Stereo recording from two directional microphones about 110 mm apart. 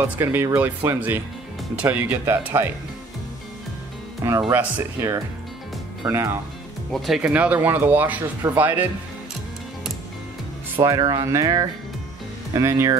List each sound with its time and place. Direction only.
0.0 s speech: 20° right (ahead or behind)
4.2 s speech: 25° right (ahead or behind)
4.6 s speech: 15° right (ahead or behind)
7.2 s speech: 15° right (ahead or behind)
10.8 s speech: 35° right (ahead or behind)